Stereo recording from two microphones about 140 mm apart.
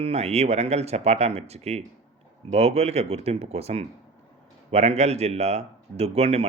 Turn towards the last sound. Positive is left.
turn(degrees=-45)  # may be behind; listen again after turning